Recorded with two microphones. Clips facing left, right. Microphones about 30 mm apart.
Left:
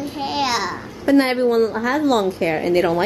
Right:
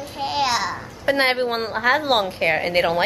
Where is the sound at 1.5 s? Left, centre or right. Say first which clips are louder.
Left 3 dB; right.